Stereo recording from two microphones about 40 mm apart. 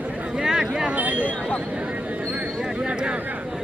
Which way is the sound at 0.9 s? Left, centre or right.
Right.